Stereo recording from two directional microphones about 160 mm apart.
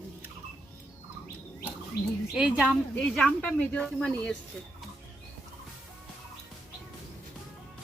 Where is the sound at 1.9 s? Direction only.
90° left.